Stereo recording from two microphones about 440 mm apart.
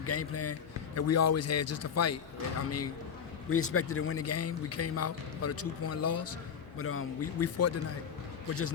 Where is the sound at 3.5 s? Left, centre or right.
Left.